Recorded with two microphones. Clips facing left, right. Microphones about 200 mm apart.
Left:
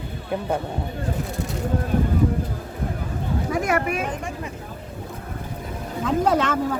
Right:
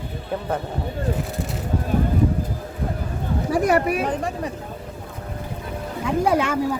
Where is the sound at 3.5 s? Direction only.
35° right (ahead or behind).